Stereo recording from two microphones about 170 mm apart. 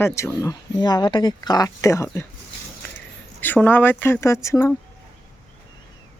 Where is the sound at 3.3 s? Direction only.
10° left (ahead or behind).